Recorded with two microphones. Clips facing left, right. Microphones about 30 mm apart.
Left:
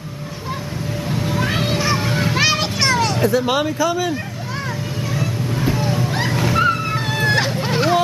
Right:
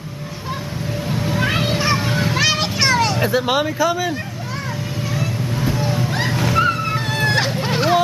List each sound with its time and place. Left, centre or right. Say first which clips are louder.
1.0 s cat: even; centre
1.4 s children playing: right 2 dB; centre
2.0 s children playing: left 1 dB; centre
2.6 s vehicle: right 1 dB; centre
3.4 s speech: even; centre
5.1 s vehicle: left 1 dB; centre